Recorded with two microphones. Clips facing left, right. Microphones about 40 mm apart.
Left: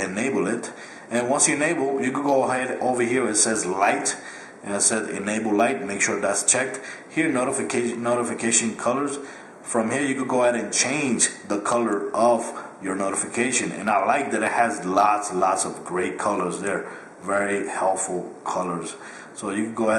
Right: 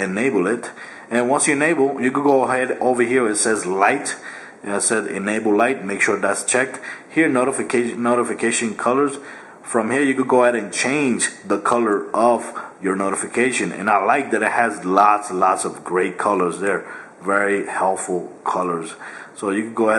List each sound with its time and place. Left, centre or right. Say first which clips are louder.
0.0 s a man's voice: right 5 dB; centre